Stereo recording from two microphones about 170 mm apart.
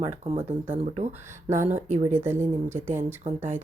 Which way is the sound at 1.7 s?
45° right (ahead or behind).